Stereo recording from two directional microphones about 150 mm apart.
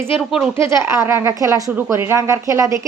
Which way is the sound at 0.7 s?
20° right (ahead or behind).